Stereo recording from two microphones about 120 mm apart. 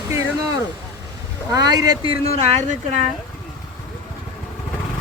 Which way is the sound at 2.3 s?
75° right (ahead or behind).